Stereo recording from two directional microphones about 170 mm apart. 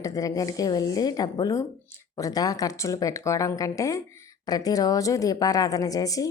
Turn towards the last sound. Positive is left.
turn(degrees=20)  # may be behind; listen again after turning